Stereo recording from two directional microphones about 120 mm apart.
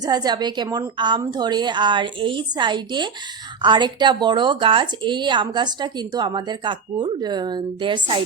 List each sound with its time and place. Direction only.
0.0 s speech: 35° right (ahead or behind)